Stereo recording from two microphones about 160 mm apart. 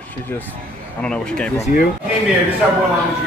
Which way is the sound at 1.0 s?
5° left (ahead or behind).